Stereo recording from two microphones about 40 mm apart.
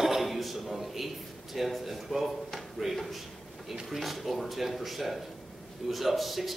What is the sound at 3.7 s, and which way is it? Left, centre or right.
Speech, centre.